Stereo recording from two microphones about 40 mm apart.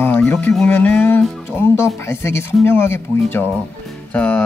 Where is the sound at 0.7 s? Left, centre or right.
Left.